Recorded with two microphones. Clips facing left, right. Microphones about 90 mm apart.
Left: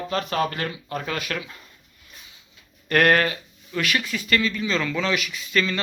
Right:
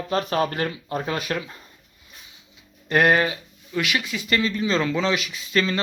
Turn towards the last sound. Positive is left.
turn(degrees=-30)  # may be behind; listen again after turning